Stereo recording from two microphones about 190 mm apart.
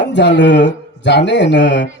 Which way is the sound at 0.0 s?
65° left (ahead or behind).